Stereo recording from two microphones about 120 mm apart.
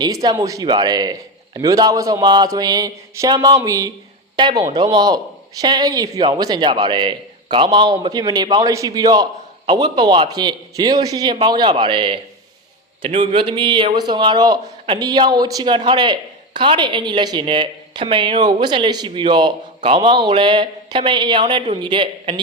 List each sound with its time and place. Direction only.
0.0 s a man's voice: 35° right (ahead or behind)
4.4 s speech: 40° right (ahead or behind)